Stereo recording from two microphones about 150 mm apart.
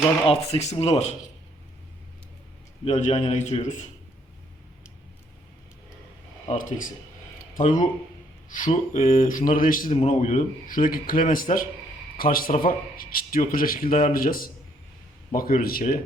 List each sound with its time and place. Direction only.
0.3 s a man's voice: 45° left (ahead or behind)
2.8 s a man's voice: 50° left (ahead or behind)
6.5 s a man's voice: 60° left (ahead or behind)
8.4 s a man's voice: 60° left (ahead or behind)
9.9 s speech: 50° left (ahead or behind); by 16.0 s 70° left (ahead or behind)